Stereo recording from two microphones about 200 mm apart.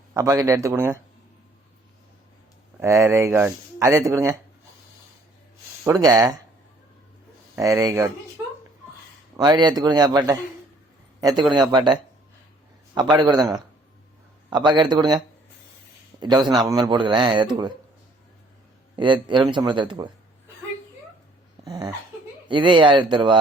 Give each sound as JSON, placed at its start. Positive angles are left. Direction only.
{"t": 0.1, "sound": "speech", "side_deg": -15}
{"t": 2.8, "sound": "speech", "side_deg": -15}
{"t": 5.8, "sound": "speech", "side_deg": -15}
{"t": 7.5, "sound": "speech", "side_deg": -15}
{"t": 9.4, "sound": "a man's voice", "side_deg": -20}
{"t": 13.3, "sound": "a man's voice", "side_deg": 0}
{"t": 14.5, "sound": "speech", "side_deg": -20}
{"t": 16.2, "sound": "speech", "side_deg": -20}
{"t": 18.9, "sound": "speech", "side_deg": -25}
{"t": 21.6, "sound": "a sound", "side_deg": -20}
{"t": 22.4, "sound": "speech", "side_deg": -25}